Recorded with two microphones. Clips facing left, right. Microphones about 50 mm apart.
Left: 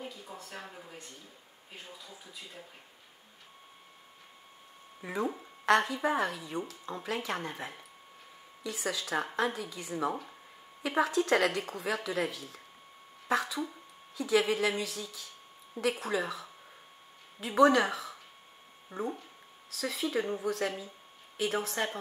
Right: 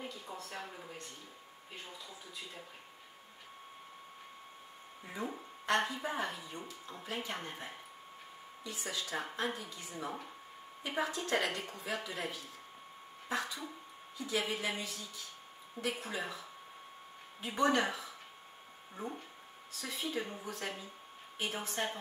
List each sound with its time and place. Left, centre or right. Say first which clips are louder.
0.3 s speech: even; centre
5.0 s speech: left 7 dB; left